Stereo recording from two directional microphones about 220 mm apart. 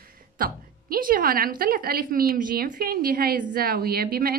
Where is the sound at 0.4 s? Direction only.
40° right (ahead or behind).